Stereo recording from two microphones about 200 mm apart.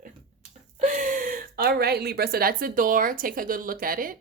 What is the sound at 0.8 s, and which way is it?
A woman's voice, 40° right (ahead or behind).